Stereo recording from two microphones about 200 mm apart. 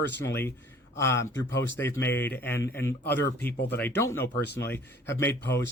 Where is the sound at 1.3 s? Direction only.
65° left (ahead or behind).